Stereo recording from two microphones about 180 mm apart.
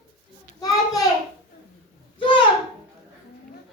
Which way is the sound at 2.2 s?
25° left (ahead or behind).